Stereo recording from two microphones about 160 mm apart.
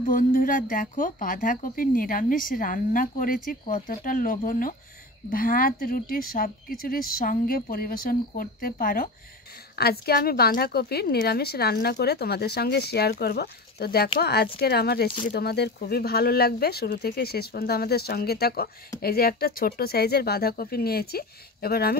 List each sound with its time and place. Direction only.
0.0 s speech: 60° left (ahead or behind)
9.8 s a woman's voice: 75° left (ahead or behind)